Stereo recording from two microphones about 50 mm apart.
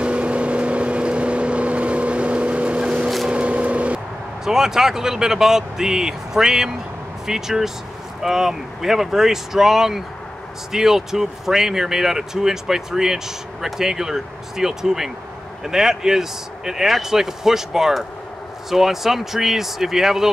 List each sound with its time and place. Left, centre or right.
0.0 s vehicle: right
3.3 s a sound: right
4.5 s speech: centre